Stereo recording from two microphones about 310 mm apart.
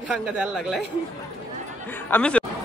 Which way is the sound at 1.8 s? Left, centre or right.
Centre.